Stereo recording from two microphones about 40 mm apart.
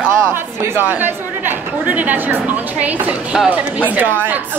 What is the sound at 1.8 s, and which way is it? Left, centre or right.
A woman's voice, right.